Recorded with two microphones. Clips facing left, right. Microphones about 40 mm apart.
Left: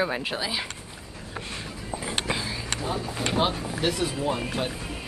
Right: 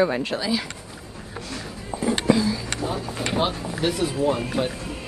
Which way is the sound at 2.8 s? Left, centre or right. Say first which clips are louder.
Right 2 dB; centre.